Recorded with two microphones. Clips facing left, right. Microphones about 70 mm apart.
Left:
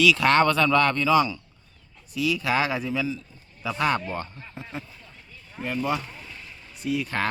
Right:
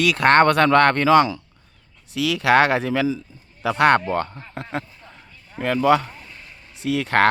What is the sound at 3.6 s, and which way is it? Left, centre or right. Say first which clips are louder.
Speech: right 8 dB; right.